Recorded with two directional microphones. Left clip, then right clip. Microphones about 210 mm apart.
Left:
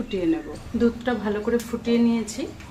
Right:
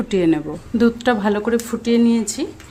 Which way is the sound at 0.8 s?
55° right (ahead or behind).